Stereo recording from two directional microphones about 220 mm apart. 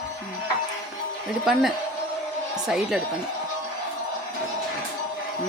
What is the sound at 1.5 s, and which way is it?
Speech, centre (ahead or behind).